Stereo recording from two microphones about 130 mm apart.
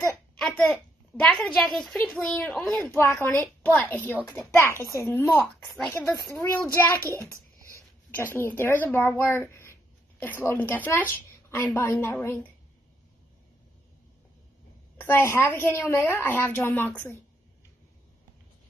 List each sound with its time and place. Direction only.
0.4 s a child's voice: 5° left (ahead or behind)
2.9 s a woman's voice: 20° left (ahead or behind)
5.2 s speech: centre (ahead or behind)
6.3 s a woman's voice: 20° left (ahead or behind)
15.0 s a woman's voice: 15° left (ahead or behind)